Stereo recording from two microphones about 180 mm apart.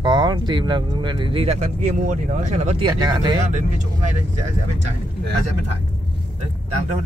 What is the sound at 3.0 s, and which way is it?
Speech, 25° right (ahead or behind).